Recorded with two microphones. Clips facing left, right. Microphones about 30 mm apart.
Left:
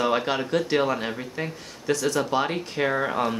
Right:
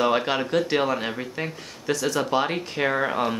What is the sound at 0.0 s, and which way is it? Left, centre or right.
Speech, centre.